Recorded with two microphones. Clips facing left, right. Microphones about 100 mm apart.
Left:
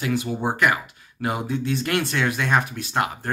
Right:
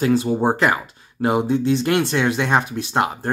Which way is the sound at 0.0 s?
30° right (ahead or behind).